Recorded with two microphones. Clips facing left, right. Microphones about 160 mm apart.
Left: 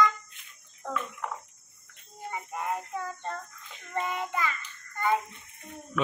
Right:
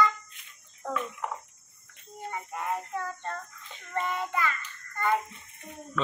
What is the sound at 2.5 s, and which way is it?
Child singing, 10° left (ahead or behind).